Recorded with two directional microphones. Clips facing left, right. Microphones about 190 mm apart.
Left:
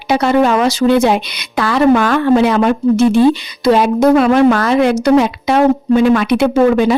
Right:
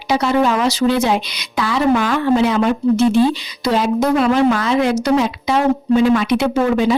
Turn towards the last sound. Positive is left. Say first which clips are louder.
# left 5 dB
turn(degrees=60)  # may be behind; listen again after turning